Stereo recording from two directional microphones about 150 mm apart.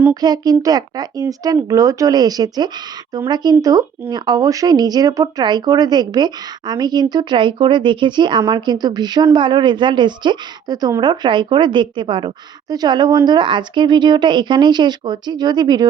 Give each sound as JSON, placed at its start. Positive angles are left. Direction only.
{"t": 0.1, "sound": "speech", "side_deg": -25}